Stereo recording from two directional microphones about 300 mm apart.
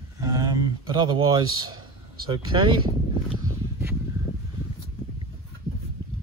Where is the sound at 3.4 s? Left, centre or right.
Centre.